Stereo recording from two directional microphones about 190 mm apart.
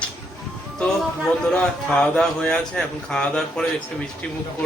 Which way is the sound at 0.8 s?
5° left (ahead or behind).